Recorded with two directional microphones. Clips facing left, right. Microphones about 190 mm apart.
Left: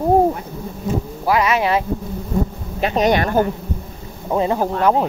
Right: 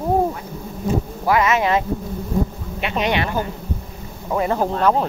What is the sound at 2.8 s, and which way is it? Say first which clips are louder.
Speech: left 5 dB; 40° left (ahead or behind).